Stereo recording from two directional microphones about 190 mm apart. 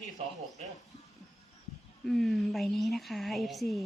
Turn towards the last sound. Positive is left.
turn(degrees=0)  # may be behind; listen again after turning